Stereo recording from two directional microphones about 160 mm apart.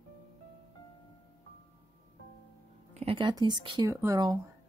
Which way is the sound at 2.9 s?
35° right (ahead or behind).